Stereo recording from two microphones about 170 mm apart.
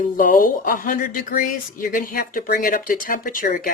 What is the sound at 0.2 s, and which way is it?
Speech, 55° left (ahead or behind).